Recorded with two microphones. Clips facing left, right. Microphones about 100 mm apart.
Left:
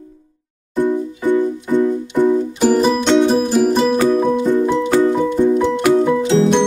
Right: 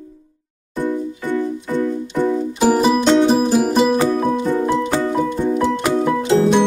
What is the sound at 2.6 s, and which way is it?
Music, 5° right (ahead or behind).